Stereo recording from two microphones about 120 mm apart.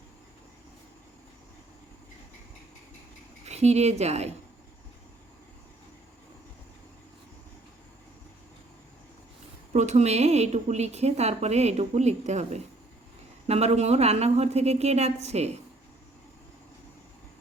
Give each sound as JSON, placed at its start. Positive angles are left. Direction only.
{"t": 3.4, "sound": "speech", "side_deg": -65}
{"t": 9.7, "sound": "a woman's voice", "side_deg": -75}